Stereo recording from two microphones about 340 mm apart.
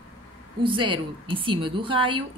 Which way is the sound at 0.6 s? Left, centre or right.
Centre.